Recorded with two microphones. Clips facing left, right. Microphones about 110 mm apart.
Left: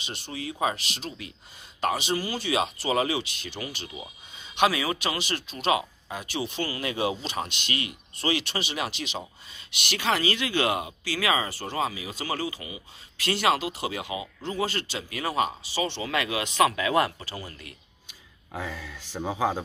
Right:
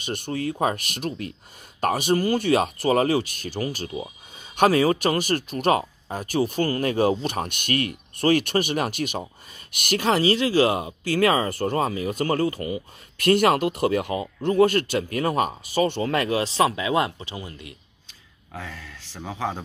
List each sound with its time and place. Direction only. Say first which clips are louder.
0.0 s speech: right 8 dB; 50° right (ahead or behind); by 11.0 s 30° right (ahead or behind)
11.1 s speech: right 7 dB; 45° right (ahead or behind); by 17.7 s 20° right (ahead or behind)
18.5 s speech: left 2 dB; 10° left (ahead or behind)